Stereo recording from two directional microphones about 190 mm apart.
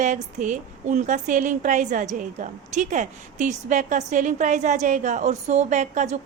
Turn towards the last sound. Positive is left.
turn(degrees=-40)  # may be behind; listen again after turning